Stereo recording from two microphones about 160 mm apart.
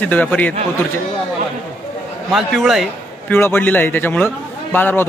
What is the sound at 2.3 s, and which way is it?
A man's voice, centre (ahead or behind).